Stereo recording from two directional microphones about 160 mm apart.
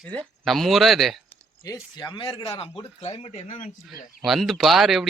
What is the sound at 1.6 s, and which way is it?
Speech, 25° left (ahead or behind).